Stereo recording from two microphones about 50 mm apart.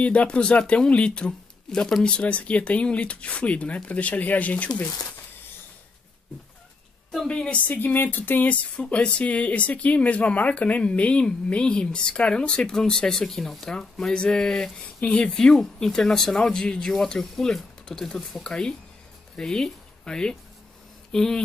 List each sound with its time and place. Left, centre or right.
0.0 s speech: left
7.2 s speech: centre
7.6 s speech: left
8.7 s speech: centre
21.1 s a sound: centre